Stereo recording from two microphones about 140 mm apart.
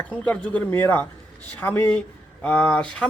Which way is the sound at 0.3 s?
10° left (ahead or behind).